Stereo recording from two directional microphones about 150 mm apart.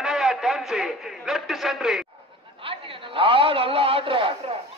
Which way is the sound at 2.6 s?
35° right (ahead or behind).